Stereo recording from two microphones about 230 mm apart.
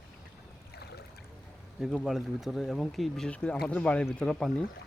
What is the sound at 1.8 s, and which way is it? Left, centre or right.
Speech, centre.